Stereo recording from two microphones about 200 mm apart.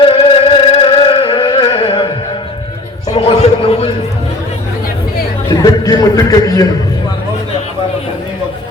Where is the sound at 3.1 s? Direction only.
30° left (ahead or behind).